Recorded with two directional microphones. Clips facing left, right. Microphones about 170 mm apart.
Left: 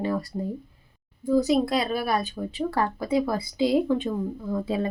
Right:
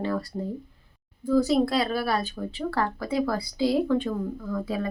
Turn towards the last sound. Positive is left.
turn(degrees=25)  # may be behind; listen again after turning